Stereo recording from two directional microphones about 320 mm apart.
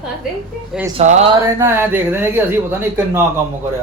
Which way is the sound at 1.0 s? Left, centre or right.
Right.